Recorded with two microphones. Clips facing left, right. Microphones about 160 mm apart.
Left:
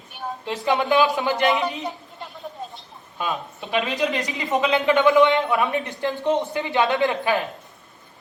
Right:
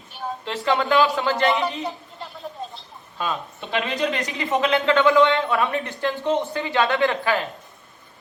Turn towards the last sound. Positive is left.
turn(degrees=20)  # may be behind; listen again after turning